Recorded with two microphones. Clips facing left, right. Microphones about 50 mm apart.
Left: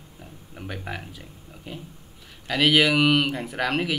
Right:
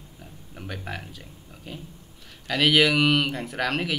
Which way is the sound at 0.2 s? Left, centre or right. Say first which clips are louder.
Left 2 dB; centre.